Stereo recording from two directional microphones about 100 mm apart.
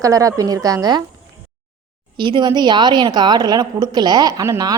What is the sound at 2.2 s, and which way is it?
A woman's voice, 50° right (ahead or behind).